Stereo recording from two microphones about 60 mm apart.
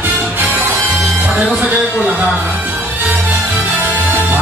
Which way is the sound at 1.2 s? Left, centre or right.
Centre.